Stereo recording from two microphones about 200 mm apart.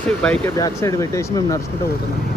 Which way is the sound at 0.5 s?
15° left (ahead or behind).